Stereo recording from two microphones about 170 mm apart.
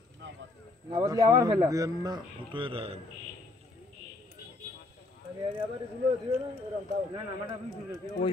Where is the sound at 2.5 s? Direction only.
30° right (ahead or behind).